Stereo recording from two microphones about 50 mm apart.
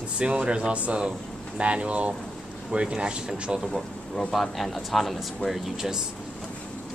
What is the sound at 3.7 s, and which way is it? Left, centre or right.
Speech, centre.